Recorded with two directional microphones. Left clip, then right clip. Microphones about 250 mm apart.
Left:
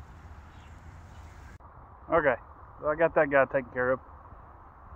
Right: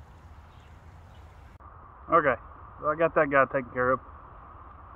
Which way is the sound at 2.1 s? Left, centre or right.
Centre.